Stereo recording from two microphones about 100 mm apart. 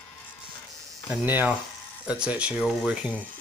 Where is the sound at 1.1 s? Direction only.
15° right (ahead or behind).